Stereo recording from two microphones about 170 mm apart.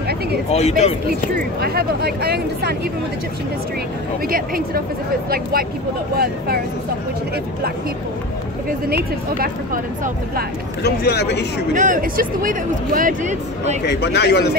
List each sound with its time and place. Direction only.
0.5 s speech: 40° left (ahead or behind)
1.6 s speech: 65° right (ahead or behind)
4.3 s speech: 60° right (ahead or behind)
8.8 s speech: 60° right (ahead or behind)
10.8 s speech: 70° left (ahead or behind)
11.7 s speech: 50° right (ahead or behind)
13.8 s speech: 85° left